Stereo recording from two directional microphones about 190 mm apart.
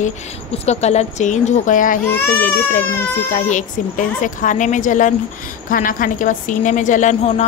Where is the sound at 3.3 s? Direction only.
40° left (ahead or behind).